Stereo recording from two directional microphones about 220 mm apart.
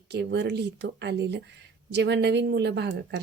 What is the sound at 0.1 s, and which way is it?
Speech, 50° right (ahead or behind).